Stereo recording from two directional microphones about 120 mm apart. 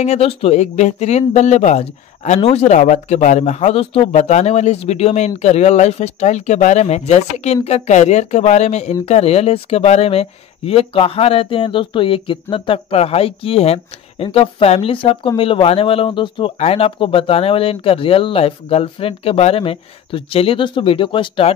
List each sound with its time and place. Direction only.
0.0 s speech: 65° left (ahead or behind); by 16.5 s 45° left (ahead or behind)
16.5 s speech: 55° left (ahead or behind)